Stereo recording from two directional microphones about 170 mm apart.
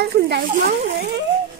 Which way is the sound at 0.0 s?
70° right (ahead or behind).